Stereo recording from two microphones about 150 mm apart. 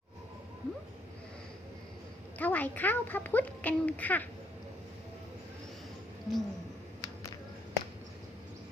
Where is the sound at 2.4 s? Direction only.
10° left (ahead or behind).